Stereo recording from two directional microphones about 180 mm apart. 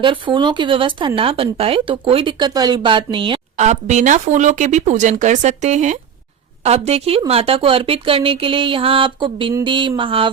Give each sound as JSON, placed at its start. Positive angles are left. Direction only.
{"t": 0.0, "sound": "speech", "side_deg": -25}
{"t": 3.7, "sound": "speech", "side_deg": -40}